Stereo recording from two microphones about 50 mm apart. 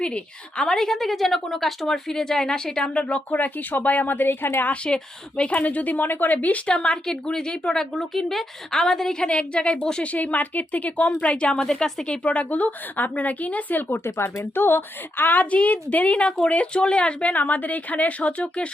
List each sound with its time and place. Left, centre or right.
0.0 s a woman's voice: left
0.7 s speech: centre; by 4.6 s left
4.9 s a woman's voice: left
6.7 s a woman's voice: centre
11.5 s a woman's voice: centre; by 14.0 s left
14.0 s a woman's voice: left